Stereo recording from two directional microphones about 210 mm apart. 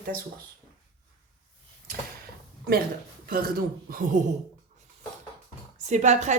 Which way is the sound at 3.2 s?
45° right (ahead or behind).